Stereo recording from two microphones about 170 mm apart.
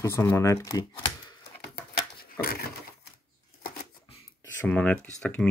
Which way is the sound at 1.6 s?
65° left (ahead or behind).